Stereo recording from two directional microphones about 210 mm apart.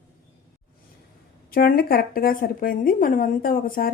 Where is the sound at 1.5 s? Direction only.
45° left (ahead or behind).